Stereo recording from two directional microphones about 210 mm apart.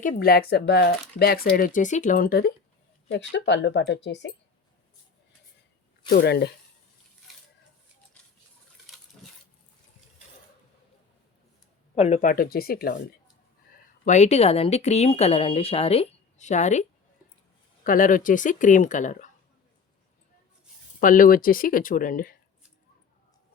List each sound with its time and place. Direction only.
0.0 s speech: 40° left (ahead or behind)
3.1 s speech: 55° left (ahead or behind)
6.1 s speech: 50° left (ahead or behind)
9.2 s a sound: centre (ahead or behind)
11.9 s speech: 30° left (ahead or behind)
14.0 s speech: 35° left (ahead or behind)
17.8 s speech: 40° left (ahead or behind)
21.0 s speech: 40° left (ahead or behind)